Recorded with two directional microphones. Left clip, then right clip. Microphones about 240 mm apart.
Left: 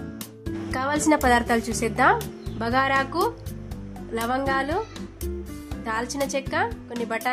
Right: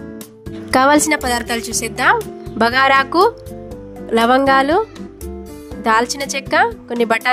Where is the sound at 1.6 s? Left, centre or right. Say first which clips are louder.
Right 4 dB; right.